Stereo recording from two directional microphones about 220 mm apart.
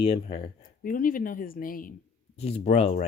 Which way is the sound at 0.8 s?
40° left (ahead or behind).